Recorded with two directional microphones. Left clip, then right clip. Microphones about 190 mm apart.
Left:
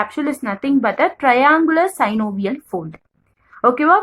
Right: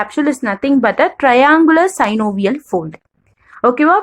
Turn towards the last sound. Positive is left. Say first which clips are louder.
# right 2 dB
turn(degrees=-30)  # may be behind; listen again after turning